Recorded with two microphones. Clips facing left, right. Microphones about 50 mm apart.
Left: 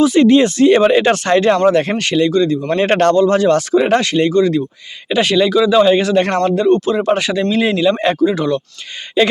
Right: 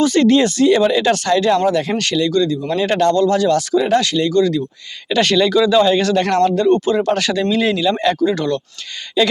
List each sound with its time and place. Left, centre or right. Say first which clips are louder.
0.0 s speech: left 3 dB; centre
0.3 s speech: left 3 dB; left
2.5 s speech: left 3 dB; left
3.2 s speech: left 2 dB; left
5.0 s speech: left 1 dB; centre
6.7 s speech: left 1 dB; centre
7.0 s speech: left 2 dB; centre
9.2 s speech: left 2 dB; left